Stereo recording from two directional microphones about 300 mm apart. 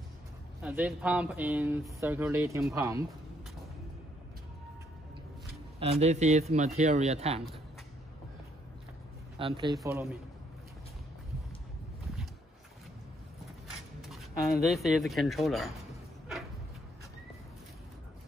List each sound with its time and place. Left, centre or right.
0.6 s speech: centre
5.8 s a man's voice: right
9.4 s speech: centre
14.1 s speech: centre